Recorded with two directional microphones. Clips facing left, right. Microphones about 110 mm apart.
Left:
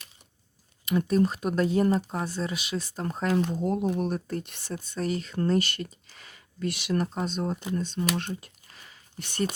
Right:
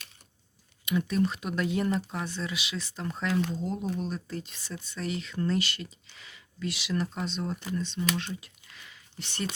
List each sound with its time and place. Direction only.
0.9 s speech: 40° left (ahead or behind)
3.5 s speech: 55° left (ahead or behind)
7.5 s speech: 25° left (ahead or behind)
7.8 s speech: 45° left (ahead or behind)